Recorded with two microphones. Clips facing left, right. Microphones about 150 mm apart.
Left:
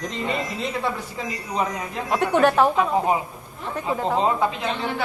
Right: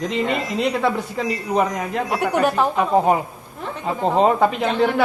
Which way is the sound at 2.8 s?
60° right (ahead or behind).